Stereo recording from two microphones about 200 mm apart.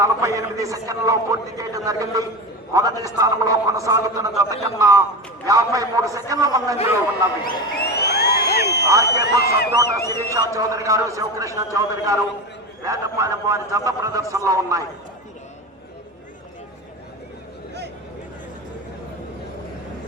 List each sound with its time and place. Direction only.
0.0 s a man's voice: 15° right (ahead or behind)
7.4 s a sound: 50° left (ahead or behind)
8.9 s a man's voice: 15° right (ahead or behind)
9.2 s speech: 55° left (ahead or behind)
10.0 s a man's voice: 15° left (ahead or behind)
10.3 s a man's voice: 15° right (ahead or behind)